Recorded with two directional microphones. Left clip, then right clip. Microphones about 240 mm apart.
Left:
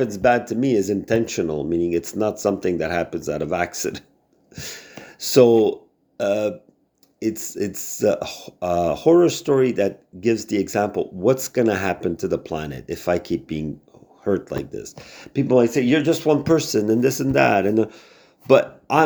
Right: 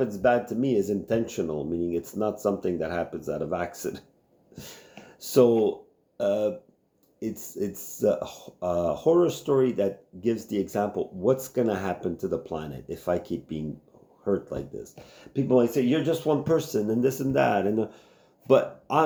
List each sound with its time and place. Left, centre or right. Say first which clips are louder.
0.0 s speech: left 5 dB; left